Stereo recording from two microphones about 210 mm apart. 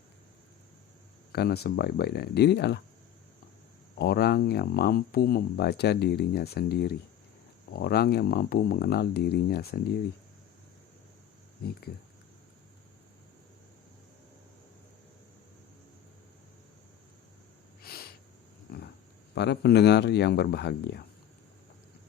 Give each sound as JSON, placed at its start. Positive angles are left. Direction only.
{"t": 1.3, "sound": "speech", "side_deg": 50}
{"t": 3.9, "sound": "speech", "side_deg": 50}
{"t": 11.6, "sound": "speech", "side_deg": 45}
{"t": 17.8, "sound": "a sound", "side_deg": 45}
{"t": 18.7, "sound": "dog", "side_deg": 45}
{"t": 19.3, "sound": "speech", "side_deg": 55}